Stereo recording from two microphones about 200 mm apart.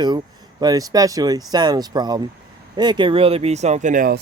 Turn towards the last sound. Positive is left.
turn(degrees=-45)  # may be behind; listen again after turning